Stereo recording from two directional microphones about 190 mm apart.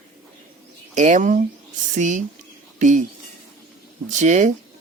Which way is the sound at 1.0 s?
40° right (ahead or behind).